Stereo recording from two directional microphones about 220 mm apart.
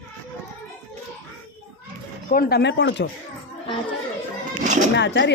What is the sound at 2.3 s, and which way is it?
Speech, 45° left (ahead or behind).